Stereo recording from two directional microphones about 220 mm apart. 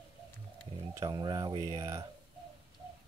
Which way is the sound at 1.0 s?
20° right (ahead or behind).